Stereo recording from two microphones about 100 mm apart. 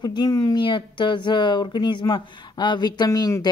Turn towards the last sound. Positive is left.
turn(degrees=40)  # may be behind; listen again after turning